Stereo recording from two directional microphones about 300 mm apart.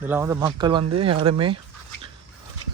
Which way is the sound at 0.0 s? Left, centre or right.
Centre.